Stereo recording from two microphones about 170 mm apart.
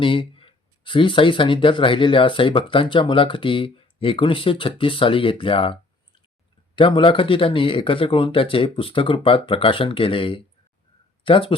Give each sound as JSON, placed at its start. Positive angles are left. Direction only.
{"t": 0.0, "sound": "speech", "side_deg": 30}
{"t": 6.7, "sound": "speech", "side_deg": 30}